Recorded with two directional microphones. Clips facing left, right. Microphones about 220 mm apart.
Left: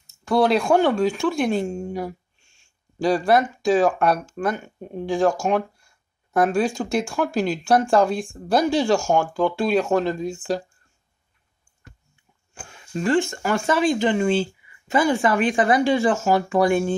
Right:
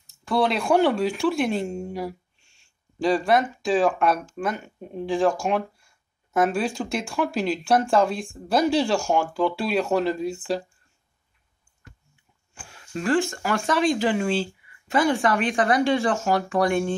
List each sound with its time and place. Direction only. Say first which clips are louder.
0.0 s speech: left 4 dB; centre (ahead or behind)
2.4 s a sound: left 2 dB; 45° left (ahead or behind)
3.0 s speech: left 2 dB; centre (ahead or behind)
12.6 s speech: left 2 dB; centre (ahead or behind)